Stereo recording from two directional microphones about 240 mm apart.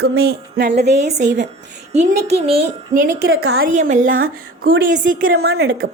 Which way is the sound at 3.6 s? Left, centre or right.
Right.